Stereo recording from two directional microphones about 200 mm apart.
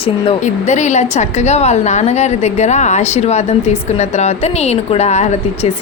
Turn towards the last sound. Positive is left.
turn(degrees=35)  # may be behind; listen again after turning